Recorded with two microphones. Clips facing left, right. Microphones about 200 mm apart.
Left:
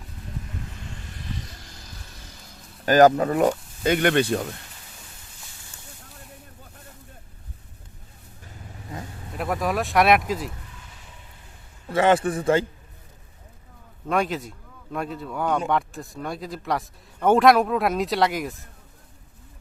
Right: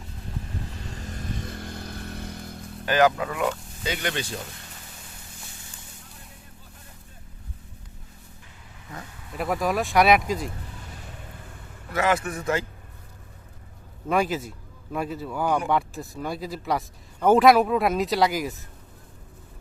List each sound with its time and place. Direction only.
0.9 s vehicle: 40° right (ahead or behind); by 2.6 s 60° right (ahead or behind)
2.8 s speech: 40° left (ahead or behind)
3.8 s speech: 55° left (ahead or behind)
9.4 s speech: centre (ahead or behind)
10.9 s a sound: 60° right (ahead or behind)
11.9 s a man's voice: 30° left (ahead or behind)
14.1 s speech: centre (ahead or behind)